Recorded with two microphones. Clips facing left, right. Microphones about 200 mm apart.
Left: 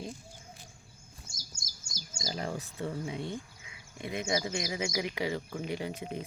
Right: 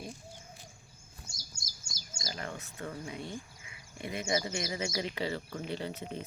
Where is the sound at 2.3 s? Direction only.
30° left (ahead or behind).